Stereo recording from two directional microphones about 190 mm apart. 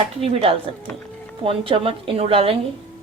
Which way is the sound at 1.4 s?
30° right (ahead or behind).